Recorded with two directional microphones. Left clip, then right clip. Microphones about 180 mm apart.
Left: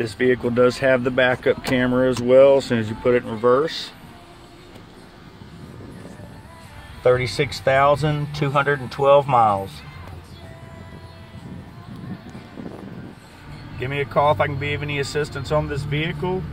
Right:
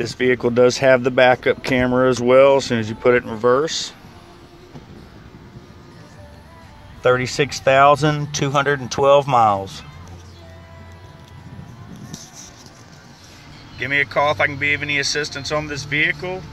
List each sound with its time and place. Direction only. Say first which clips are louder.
0.0 s speech: right 2 dB; 30° right (ahead or behind)
7.0 s speech: right 1 dB; 20° right (ahead or behind)
8.5 s speech: right 1 dB; 55° right (ahead or behind)
9.2 s speech: right 2 dB; 30° right (ahead or behind)
13.7 s speech: right 3 dB; centre (ahead or behind)